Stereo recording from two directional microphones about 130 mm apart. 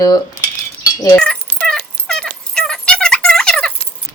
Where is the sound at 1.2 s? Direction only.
5° left (ahead or behind).